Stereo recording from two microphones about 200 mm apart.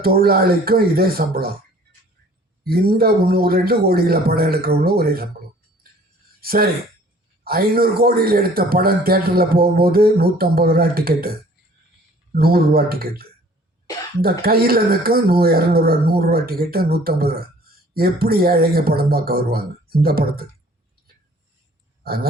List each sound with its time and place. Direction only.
0.0 s a man's voice: 50° right (ahead or behind)
2.6 s a man's voice: 50° right (ahead or behind)
6.4 s a man's voice: 50° right (ahead or behind)
22.0 s speech: 50° right (ahead or behind)